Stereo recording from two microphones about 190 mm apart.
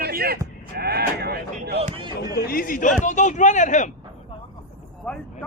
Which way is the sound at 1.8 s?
30° right (ahead or behind).